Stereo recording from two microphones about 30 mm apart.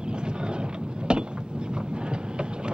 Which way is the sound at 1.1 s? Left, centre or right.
Right.